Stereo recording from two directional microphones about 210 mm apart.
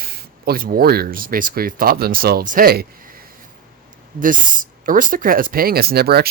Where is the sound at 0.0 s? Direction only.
45° right (ahead or behind).